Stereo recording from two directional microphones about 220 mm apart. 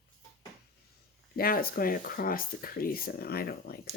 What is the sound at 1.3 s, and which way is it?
Speech, 40° left (ahead or behind).